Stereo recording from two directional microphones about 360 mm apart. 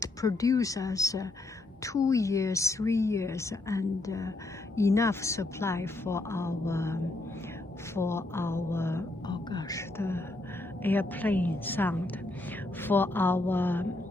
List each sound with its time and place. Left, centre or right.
0.0 s a woman's voice: centre